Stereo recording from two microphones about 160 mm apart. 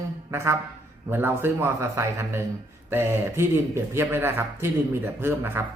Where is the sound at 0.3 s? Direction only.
15° right (ahead or behind).